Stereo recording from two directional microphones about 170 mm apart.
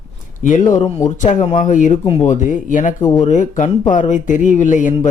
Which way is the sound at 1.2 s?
45° left (ahead or behind).